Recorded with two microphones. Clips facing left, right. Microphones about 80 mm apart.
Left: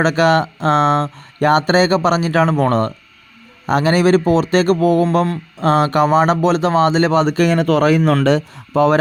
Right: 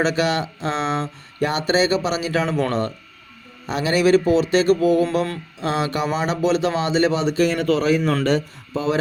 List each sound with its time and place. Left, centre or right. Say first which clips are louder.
0.0 s speech: left 6 dB; left